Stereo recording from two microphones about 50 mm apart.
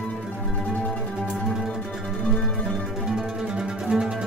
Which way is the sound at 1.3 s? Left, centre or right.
Centre.